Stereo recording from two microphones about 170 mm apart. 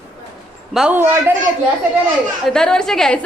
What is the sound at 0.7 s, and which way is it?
Speech, 5° right (ahead or behind).